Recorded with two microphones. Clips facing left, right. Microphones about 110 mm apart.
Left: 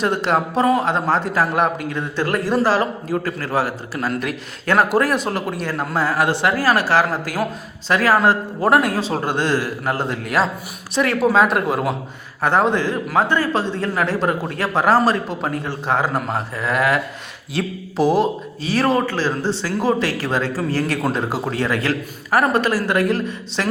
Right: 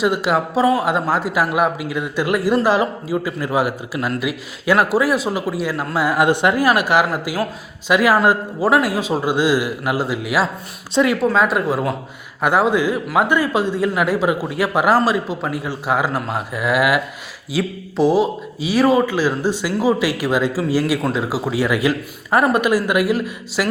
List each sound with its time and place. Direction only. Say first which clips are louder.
0.0 s a man's voice: right 1 dB; 5° right (ahead or behind)
6.1 s speech: right 4 dB; 20° right (ahead or behind)
10.9 s speech: right 3 dB; 20° right (ahead or behind)
11.2 s a man's voice: left 1 dB; 5° left (ahead or behind)
18.6 s a man's voice: right 3 dB; 10° right (ahead or behind)